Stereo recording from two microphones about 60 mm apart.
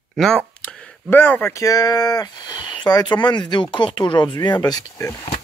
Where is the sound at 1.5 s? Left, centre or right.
Left.